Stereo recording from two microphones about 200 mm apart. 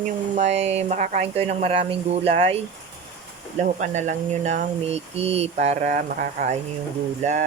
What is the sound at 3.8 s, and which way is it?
Speech, 35° right (ahead or behind).